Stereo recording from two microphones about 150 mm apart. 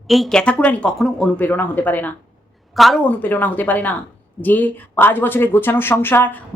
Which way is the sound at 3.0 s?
15° left (ahead or behind).